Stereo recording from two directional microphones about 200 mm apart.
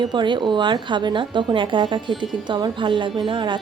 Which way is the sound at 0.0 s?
20° right (ahead or behind).